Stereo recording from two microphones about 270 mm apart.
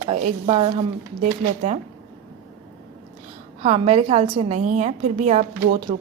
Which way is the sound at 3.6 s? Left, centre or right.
Right.